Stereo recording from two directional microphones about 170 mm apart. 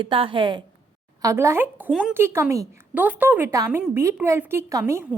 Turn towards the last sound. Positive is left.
turn(degrees=-15)  # may be behind; listen again after turning